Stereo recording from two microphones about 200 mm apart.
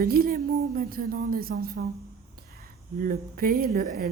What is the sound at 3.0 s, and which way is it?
Speech, 45° right (ahead or behind).